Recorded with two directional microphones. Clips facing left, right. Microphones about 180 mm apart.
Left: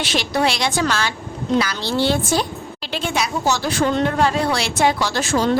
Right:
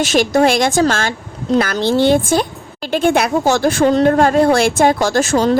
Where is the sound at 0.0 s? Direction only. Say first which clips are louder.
Right 7 dB; 45° right (ahead or behind).